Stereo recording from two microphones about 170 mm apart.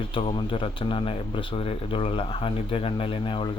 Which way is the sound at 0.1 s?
35° left (ahead or behind).